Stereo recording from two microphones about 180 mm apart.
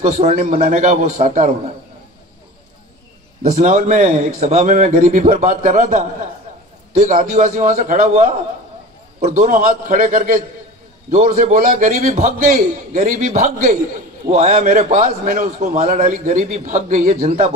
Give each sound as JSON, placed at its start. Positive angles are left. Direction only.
{"t": 0.0, "sound": "a man's voice", "side_deg": -35}
{"t": 0.6, "sound": "a man's voice", "side_deg": -45}
{"t": 3.5, "sound": "a man's voice", "side_deg": -40}
{"t": 9.5, "sound": "a man's voice", "side_deg": -50}
{"t": 14.8, "sound": "a man's voice", "side_deg": -50}